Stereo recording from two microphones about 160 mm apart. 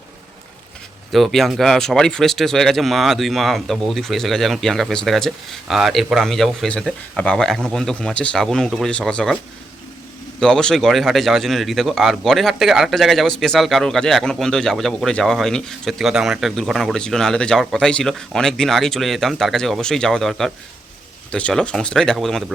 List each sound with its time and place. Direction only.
1.1 s speech: centre (ahead or behind)
10.4 s speech: 5° left (ahead or behind)